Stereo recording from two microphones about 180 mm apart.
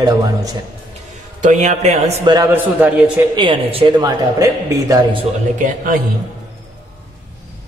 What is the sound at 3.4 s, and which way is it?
Speech, 25° right (ahead or behind).